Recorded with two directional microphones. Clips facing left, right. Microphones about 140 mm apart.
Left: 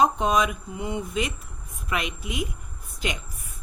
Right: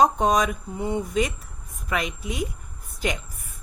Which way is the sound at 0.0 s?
40° right (ahead or behind).